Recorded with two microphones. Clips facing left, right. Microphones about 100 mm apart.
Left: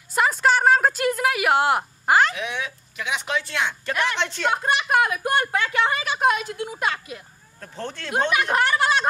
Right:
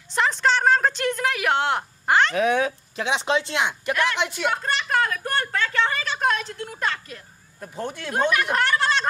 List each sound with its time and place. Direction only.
0.1 s a sound: 5° left (ahead or behind)
2.3 s speech: 40° right (ahead or behind); by 3.9 s 20° right (ahead or behind)
3.9 s speech: 15° left (ahead or behind)
4.2 s speech: 10° right (ahead or behind)
4.5 s speech: 15° left (ahead or behind)
7.6 s speech: 15° right (ahead or behind)
8.3 s a woman's voice: 15° left (ahead or behind)